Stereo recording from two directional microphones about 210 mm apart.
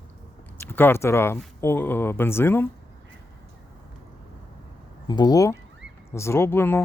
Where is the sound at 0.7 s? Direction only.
10° left (ahead or behind).